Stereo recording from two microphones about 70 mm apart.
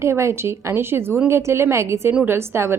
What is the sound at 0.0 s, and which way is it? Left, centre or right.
A woman's voice, right.